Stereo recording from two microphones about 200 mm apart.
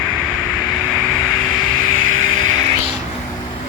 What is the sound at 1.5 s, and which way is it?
Vehicle, 90° right.